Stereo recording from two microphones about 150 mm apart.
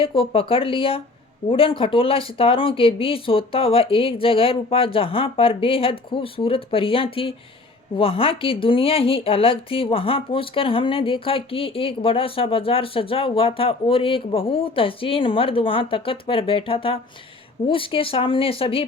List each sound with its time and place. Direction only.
0.0 s a woman's voice: 35° left (ahead or behind)